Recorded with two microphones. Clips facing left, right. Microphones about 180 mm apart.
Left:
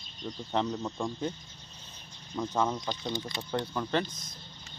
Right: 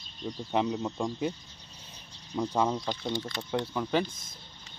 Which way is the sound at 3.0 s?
15° left (ahead or behind).